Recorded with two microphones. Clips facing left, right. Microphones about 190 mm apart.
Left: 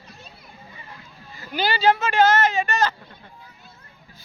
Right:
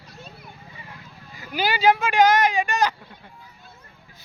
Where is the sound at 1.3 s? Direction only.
10° right (ahead or behind).